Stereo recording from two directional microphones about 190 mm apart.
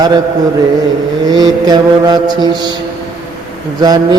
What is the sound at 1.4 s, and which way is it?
Mantra, 20° right (ahead or behind).